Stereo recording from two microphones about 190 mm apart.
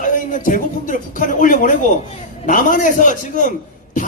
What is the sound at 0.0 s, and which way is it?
A man's voice, 45° left (ahead or behind).